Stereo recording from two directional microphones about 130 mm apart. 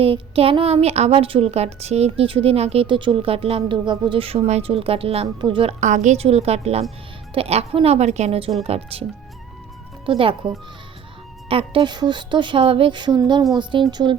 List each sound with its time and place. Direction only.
0.0 s speech: 45° right (ahead or behind)
5.8 s speech: 65° right (ahead or behind); by 9.0 s 50° right (ahead or behind)
10.1 s speech: 45° right (ahead or behind)